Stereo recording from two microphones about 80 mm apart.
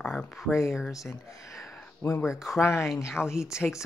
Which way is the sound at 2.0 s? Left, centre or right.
Left.